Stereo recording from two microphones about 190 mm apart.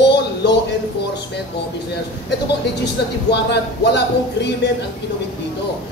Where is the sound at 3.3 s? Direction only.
60° left (ahead or behind).